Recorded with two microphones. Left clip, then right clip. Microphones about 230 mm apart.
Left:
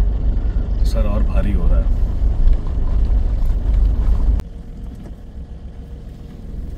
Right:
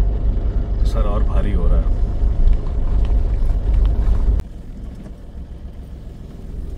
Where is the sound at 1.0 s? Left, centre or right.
Left.